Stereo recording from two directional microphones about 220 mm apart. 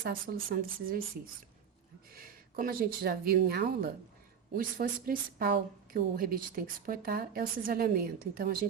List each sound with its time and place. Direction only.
0.0 s a woman's voice: 40° right (ahead or behind)
2.1 s a woman's voice: 40° right (ahead or behind)